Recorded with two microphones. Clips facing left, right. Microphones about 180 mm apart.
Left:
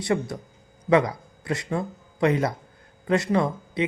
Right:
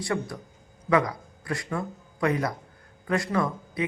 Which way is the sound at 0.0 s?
20° left (ahead or behind).